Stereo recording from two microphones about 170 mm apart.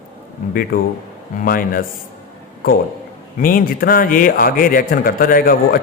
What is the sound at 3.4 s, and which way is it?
A man's voice, 55° left (ahead or behind).